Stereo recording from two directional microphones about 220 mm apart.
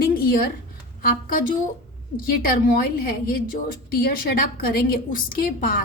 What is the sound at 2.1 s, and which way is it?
A woman's voice, 40° left (ahead or behind).